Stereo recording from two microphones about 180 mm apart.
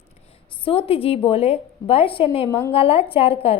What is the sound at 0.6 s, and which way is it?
A woman's voice, 30° left (ahead or behind).